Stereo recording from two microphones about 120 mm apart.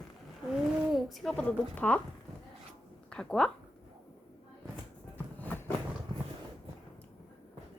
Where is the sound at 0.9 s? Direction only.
Centre (ahead or behind).